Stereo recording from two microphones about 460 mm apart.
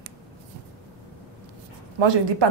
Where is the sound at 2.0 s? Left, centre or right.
Right.